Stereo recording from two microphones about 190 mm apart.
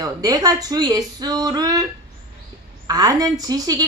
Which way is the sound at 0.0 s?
20° right (ahead or behind).